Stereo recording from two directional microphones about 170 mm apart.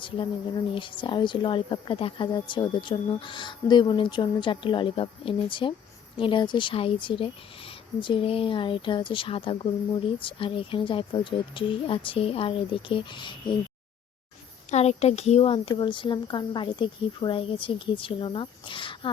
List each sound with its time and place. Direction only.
0.0 s speech: 30° left (ahead or behind)
14.7 s speech: 40° left (ahead or behind)